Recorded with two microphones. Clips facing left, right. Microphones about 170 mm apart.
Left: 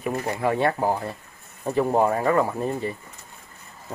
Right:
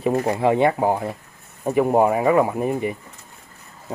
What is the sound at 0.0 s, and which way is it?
Speech, 30° right (ahead or behind).